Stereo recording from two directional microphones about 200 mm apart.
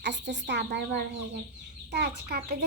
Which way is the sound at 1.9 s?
55° right (ahead or behind).